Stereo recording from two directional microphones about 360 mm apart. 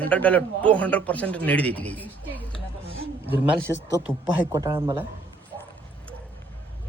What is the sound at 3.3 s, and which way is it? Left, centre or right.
A man's voice, centre.